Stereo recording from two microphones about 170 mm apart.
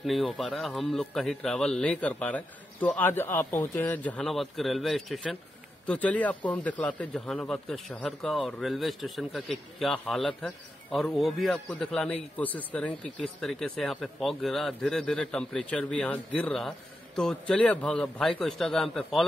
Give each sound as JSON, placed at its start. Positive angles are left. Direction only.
{"t": 0.0, "sound": "a man's voice", "side_deg": 0}